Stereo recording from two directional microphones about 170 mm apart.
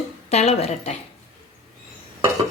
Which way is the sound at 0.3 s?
40° left (ahead or behind).